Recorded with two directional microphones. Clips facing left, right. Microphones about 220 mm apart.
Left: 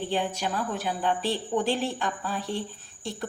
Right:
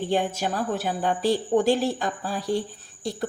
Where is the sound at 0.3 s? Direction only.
45° right (ahead or behind).